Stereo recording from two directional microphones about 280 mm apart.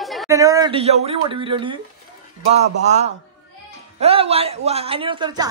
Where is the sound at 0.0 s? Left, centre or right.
Centre.